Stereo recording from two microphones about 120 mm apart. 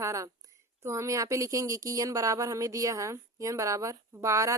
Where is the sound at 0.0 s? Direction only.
25° right (ahead or behind).